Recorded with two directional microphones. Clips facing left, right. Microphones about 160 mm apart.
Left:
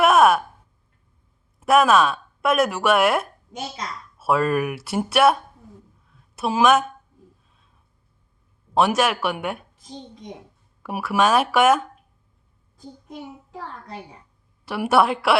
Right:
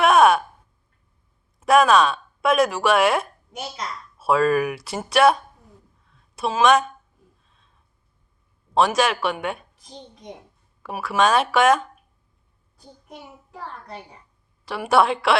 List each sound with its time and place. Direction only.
0.0 s a sound: 5° left (ahead or behind)
1.5 s a woman's voice: 5° left (ahead or behind)
8.7 s speech: 5° left (ahead or behind)
10.8 s speech: 10° left (ahead or behind)
14.6 s speech: 5° left (ahead or behind)